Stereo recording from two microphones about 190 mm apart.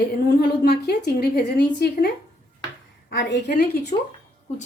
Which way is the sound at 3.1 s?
70° left (ahead or behind).